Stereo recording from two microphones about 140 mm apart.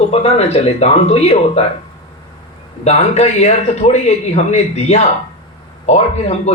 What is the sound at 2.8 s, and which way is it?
Speech, 50° left (ahead or behind).